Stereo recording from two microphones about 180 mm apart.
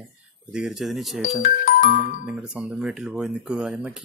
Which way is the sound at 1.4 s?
50° left (ahead or behind).